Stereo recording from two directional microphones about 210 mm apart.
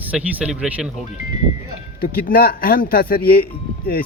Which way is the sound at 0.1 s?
5° right (ahead or behind).